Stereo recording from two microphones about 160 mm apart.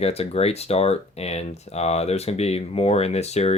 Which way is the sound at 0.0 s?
40° left (ahead or behind).